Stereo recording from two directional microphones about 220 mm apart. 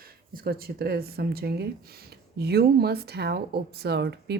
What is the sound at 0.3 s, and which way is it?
Speech, 45° right (ahead or behind).